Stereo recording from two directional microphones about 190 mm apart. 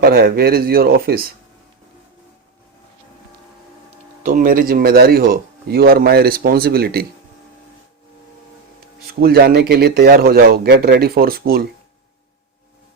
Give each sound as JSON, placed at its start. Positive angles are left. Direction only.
{"t": 0.0, "sound": "speech", "side_deg": -55}
{"t": 4.2, "sound": "speech", "side_deg": -45}
{"t": 9.2, "sound": "speech", "side_deg": -55}